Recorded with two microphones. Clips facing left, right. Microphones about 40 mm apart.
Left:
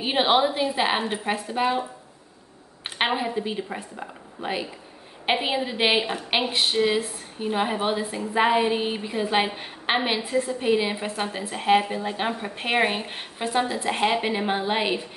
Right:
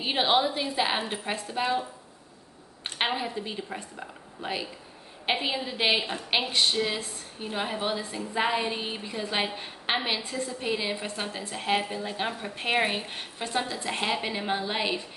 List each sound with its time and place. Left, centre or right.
0.0 s a woman's voice: centre